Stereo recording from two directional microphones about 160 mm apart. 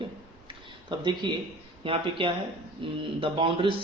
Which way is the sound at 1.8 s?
35° right (ahead or behind).